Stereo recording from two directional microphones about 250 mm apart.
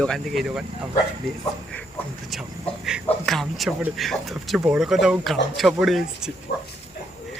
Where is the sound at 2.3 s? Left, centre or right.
Centre.